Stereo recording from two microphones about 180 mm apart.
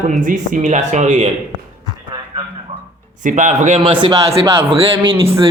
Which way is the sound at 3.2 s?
45° right (ahead or behind).